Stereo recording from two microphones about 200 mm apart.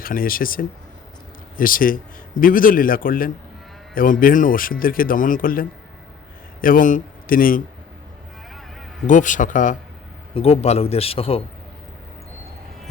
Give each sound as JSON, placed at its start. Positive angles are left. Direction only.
{"t": 0.0, "sound": "a man's voice", "side_deg": 45}
{"t": 9.0, "sound": "speech", "side_deg": 40}